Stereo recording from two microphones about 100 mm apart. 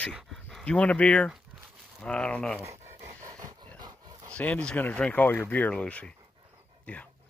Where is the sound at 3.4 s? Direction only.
35° right (ahead or behind).